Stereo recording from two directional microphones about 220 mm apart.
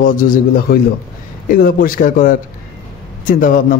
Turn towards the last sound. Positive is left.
turn(degrees=40)  # may be behind; listen again after turning